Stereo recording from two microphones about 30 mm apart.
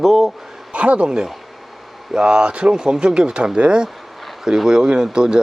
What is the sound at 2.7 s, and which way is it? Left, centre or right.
Speech, right.